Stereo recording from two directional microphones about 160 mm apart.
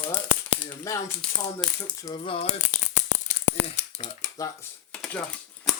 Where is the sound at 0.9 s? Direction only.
20° left (ahead or behind).